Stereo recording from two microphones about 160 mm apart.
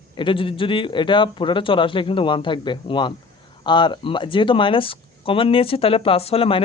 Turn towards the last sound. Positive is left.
turn(degrees=35)  # may be behind; listen again after turning